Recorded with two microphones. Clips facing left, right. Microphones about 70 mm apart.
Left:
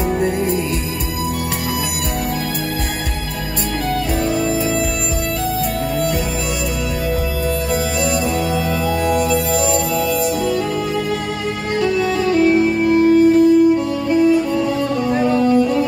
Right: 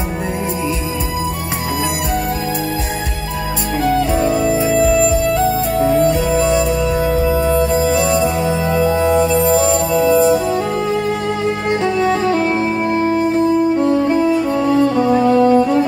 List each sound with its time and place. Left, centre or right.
7.7 s music: right
11.7 s music: right